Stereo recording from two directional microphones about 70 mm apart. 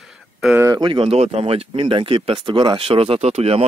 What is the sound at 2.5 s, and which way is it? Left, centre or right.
Speech, right.